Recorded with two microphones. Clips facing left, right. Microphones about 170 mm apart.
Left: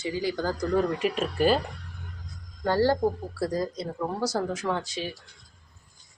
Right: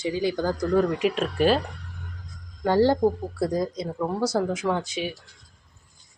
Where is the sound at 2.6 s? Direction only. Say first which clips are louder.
Right 3 dB; 15° right (ahead or behind).